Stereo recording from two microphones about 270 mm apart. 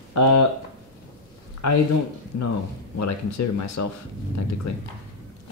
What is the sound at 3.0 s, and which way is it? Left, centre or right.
Speech, left.